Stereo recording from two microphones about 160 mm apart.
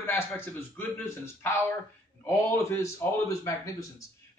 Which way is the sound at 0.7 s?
15° left (ahead or behind).